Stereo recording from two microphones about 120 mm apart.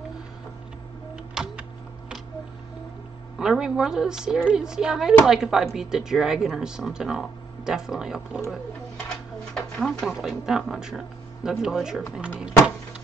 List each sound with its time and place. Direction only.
1.1 s a sound: 5° right (ahead or behind)
3.3 s speech: 5° right (ahead or behind)
9.5 s speech: 5° left (ahead or behind)